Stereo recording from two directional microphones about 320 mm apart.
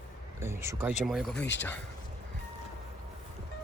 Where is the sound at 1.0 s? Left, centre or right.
Centre.